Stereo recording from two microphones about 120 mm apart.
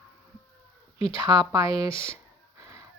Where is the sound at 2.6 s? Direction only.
25° right (ahead or behind).